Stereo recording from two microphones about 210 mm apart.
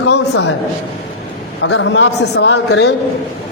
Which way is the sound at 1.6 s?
60° left (ahead or behind).